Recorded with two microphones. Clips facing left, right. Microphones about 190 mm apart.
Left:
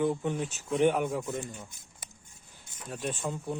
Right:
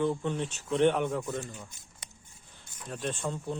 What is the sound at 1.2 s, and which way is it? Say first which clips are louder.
Speech: even; 15° left (ahead or behind).